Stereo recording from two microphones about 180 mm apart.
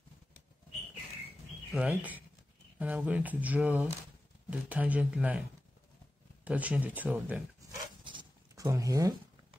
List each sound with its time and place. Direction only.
1.7 s speech: 5° right (ahead or behind)
6.4 s speech: 10° right (ahead or behind)
8.0 s zipper: 25° right (ahead or behind)